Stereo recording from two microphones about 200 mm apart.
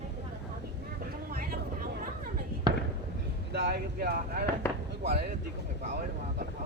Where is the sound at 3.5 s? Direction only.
50° right (ahead or behind).